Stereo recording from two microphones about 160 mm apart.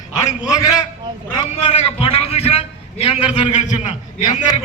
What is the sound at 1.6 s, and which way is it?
A man's voice, 35° left (ahead or behind).